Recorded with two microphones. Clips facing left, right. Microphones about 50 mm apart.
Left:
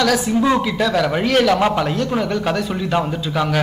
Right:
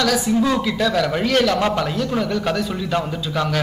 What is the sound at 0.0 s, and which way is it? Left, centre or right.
A man's voice, centre.